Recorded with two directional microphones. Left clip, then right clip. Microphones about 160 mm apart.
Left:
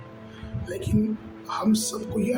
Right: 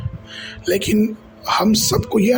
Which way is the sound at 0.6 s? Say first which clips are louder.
Right 11 dB; 60° right (ahead or behind).